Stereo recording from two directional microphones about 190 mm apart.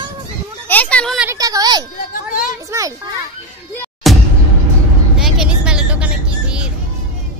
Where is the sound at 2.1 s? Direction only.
45° left (ahead or behind).